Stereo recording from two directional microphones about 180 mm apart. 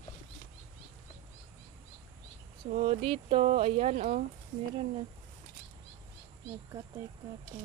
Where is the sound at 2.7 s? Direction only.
35° right (ahead or behind).